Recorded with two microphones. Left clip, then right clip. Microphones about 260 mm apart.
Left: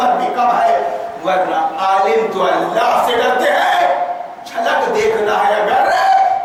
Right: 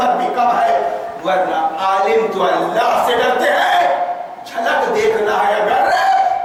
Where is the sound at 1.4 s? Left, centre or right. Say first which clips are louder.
Left 1 dB; centre.